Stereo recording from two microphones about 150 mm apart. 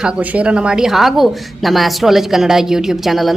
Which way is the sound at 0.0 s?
10° right (ahead or behind).